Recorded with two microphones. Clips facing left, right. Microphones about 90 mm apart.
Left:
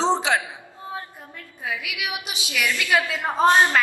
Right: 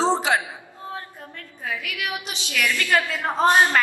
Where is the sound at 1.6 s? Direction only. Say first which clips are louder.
Even; 10° left (ahead or behind).